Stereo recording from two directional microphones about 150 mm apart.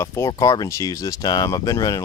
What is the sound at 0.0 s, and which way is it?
Speech, 20° left (ahead or behind).